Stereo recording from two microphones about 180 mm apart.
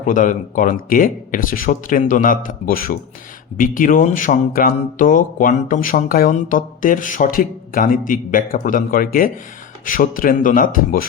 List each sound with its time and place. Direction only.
0.0 s speech: 45° left (ahead or behind)